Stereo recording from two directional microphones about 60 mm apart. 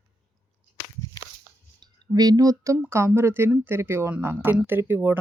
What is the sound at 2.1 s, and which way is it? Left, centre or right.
Speech, right.